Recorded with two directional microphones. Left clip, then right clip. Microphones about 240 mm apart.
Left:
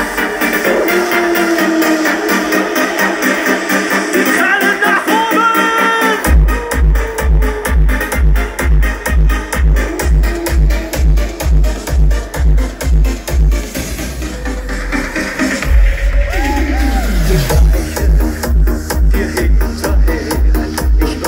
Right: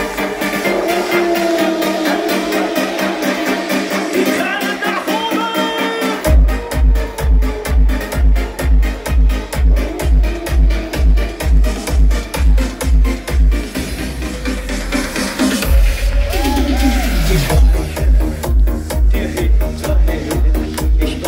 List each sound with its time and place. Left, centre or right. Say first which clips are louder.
0.0 s music: left 4 dB; left
14.9 s music: left 2 dB; centre
19.1 s music: left 3 dB; left